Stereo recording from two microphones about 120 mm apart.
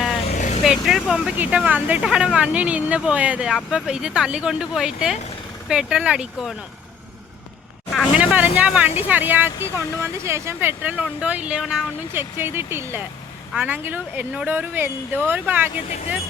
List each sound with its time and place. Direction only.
0.3 s vehicle: 90° left
0.6 s speech: 5° right (ahead or behind)
8.1 s speech: 10° right (ahead or behind)
12.1 s speech: 20° right (ahead or behind)